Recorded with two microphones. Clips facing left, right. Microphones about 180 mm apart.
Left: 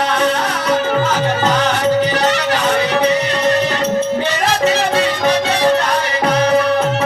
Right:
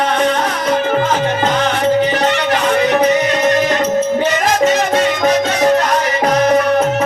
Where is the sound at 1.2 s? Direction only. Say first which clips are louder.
Even; 35° left (ahead or behind).